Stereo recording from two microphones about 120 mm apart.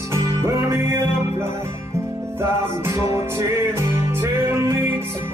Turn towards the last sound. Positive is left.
turn(degrees=-20)  # may be behind; listen again after turning